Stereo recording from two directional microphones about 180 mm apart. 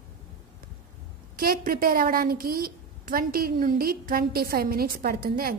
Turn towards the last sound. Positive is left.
turn(degrees=-55)  # may be behind; listen again after turning